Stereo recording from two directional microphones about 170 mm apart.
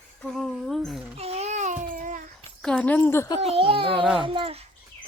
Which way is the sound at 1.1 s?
40° right (ahead or behind).